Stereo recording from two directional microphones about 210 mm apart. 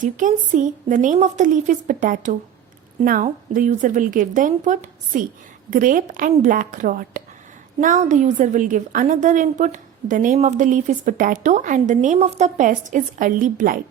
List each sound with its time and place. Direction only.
0.0 s a woman's voice: 40° right (ahead or behind)